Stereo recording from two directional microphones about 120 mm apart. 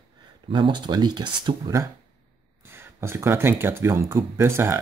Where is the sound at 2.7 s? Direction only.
20° right (ahead or behind).